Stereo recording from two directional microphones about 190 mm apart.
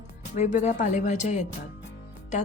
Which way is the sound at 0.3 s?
35° left (ahead or behind).